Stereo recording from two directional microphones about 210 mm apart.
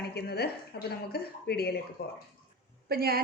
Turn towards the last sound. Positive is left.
turn(degrees=-50)  # may be behind; listen again after turning